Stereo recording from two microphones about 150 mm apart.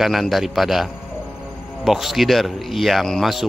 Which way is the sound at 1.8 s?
Centre (ahead or behind).